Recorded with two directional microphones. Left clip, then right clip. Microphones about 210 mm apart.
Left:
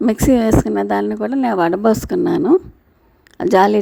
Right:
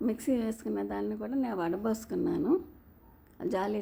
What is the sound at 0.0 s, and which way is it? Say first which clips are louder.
A woman's voice: left 17 dB; 45° left (ahead or behind).